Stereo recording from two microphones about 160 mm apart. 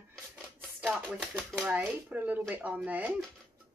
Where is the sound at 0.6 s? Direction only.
Centre (ahead or behind).